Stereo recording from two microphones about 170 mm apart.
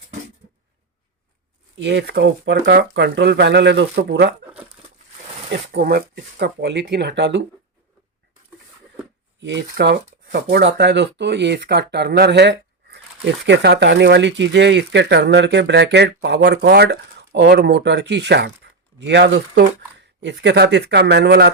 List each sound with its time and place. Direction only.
1.8 s speech: 90° right; by 4.4 s 70° right (ahead or behind)
5.5 s speech: 70° right (ahead or behind); by 7.4 s 90° right
9.4 s speech: 90° right
10.5 s speech: 90° right; by 21.5 s 75° right (ahead or behind)